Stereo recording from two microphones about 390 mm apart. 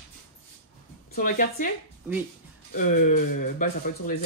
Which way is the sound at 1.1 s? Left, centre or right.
Centre.